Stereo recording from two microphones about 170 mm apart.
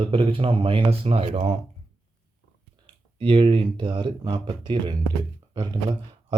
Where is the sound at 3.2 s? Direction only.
30° right (ahead or behind).